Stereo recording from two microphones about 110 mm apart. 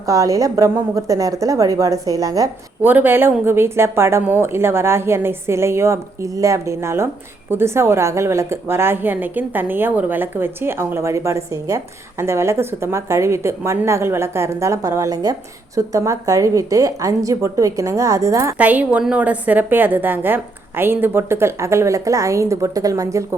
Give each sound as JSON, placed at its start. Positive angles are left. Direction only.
{"t": 0.0, "sound": "a woman's voice", "side_deg": -30}
{"t": 2.8, "sound": "a woman's voice", "side_deg": -15}
{"t": 18.5, "sound": "a woman's voice", "side_deg": -15}